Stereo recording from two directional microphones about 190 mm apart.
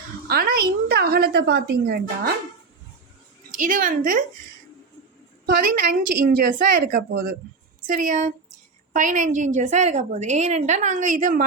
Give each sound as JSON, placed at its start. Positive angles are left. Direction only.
{"t": 0.3, "sound": "a woman's voice", "side_deg": -50}
{"t": 3.5, "sound": "a woman's voice", "side_deg": -45}
{"t": 5.5, "sound": "a woman's voice", "side_deg": -50}